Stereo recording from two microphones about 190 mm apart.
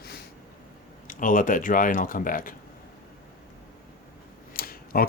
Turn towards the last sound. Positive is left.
turn(degrees=50)  # may be behind; listen again after turning